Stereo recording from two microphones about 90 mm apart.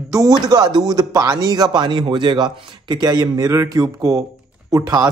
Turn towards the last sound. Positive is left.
turn(degrees=-45)  # may be behind; listen again after turning